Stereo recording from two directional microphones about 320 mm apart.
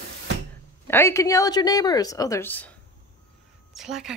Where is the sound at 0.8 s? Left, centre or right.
Centre.